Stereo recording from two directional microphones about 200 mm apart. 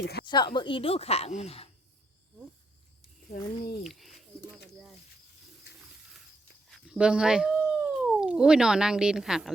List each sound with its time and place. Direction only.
0.0 s speech: 55° left (ahead or behind)
0.3 s speech: 20° left (ahead or behind)
3.8 s a sound: centre (ahead or behind)
6.7 s speech: 5° right (ahead or behind)